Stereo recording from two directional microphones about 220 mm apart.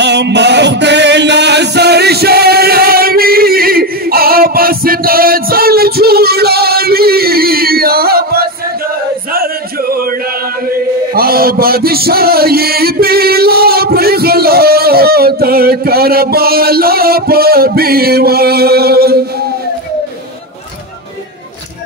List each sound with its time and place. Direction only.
0.0 s music: 50° right (ahead or behind)
9.3 s chant: 40° right (ahead or behind)
11.1 s a sound: 45° right (ahead or behind)